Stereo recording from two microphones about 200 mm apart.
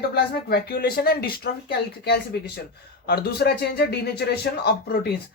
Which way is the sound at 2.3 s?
55° left (ahead or behind).